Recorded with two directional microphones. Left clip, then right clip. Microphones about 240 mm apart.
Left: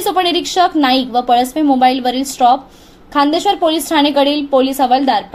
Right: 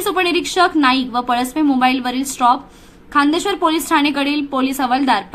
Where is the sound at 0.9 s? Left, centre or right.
Right.